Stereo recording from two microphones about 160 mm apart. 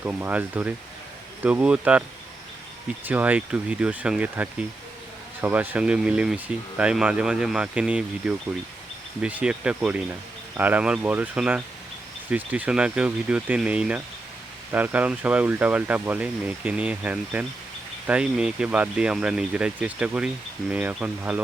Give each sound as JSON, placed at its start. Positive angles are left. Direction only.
{"t": 0.0, "sound": "speech", "side_deg": -10}